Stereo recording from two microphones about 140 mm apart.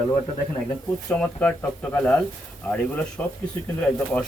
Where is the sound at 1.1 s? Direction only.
10° left (ahead or behind).